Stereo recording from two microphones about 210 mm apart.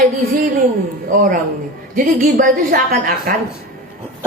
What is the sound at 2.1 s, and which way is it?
A woman's voice, 45° right (ahead or behind).